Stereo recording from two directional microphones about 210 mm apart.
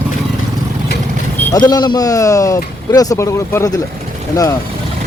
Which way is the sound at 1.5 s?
20° left (ahead or behind).